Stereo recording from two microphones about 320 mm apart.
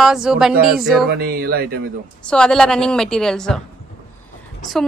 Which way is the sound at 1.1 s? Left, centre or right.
Right.